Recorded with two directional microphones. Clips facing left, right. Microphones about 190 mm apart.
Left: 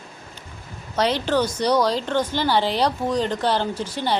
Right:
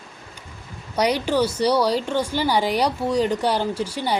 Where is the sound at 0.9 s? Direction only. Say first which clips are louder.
Even; 10° right (ahead or behind).